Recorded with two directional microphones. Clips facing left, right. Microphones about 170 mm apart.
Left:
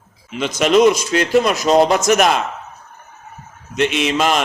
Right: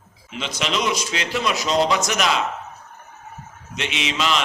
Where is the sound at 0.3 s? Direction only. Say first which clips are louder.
Left 10 dB; 50° left (ahead or behind).